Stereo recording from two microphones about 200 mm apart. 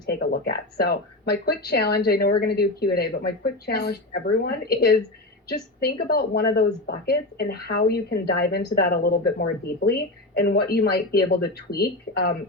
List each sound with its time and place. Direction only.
0.0 s speech: 55° left (ahead or behind)